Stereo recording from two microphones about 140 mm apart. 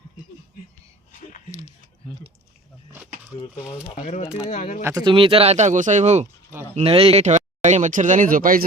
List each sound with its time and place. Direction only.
3.3 s speech: 35° left (ahead or behind)
3.9 s speech: 55° left (ahead or behind)
4.8 s speech: 20° right (ahead or behind)
5.0 s speech: 40° right (ahead or behind); by 6.2 s 55° right (ahead or behind)
6.7 s speech: 45° right (ahead or behind); by 8.6 s 90° right